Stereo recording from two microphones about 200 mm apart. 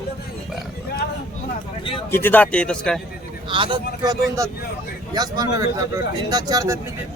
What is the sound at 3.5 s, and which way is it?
Speech, 25° right (ahead or behind).